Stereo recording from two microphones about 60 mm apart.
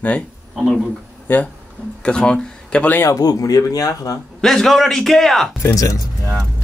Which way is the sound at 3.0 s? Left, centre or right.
Left.